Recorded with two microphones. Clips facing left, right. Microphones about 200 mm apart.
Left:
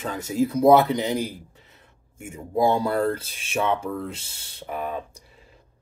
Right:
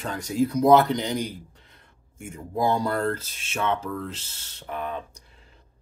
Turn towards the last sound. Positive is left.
turn(degrees=5)  # may be behind; listen again after turning